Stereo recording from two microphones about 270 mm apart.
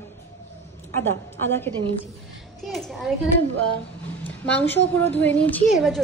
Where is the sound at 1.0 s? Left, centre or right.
Centre.